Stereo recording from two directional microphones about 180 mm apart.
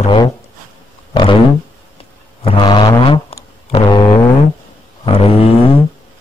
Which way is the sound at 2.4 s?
25° left (ahead or behind).